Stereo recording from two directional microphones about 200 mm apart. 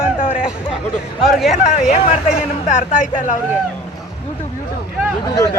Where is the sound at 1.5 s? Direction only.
40° left (ahead or behind).